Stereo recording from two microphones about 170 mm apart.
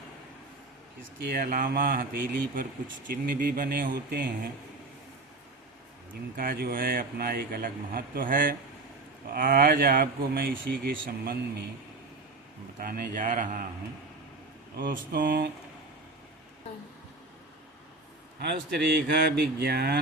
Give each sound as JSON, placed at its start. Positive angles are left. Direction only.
{"t": 1.2, "sound": "speech", "side_deg": -60}
{"t": 6.3, "sound": "speech", "side_deg": -55}
{"t": 12.8, "sound": "speech", "side_deg": -60}
{"t": 14.8, "sound": "speech", "side_deg": -55}
{"t": 18.3, "sound": "speech", "side_deg": -70}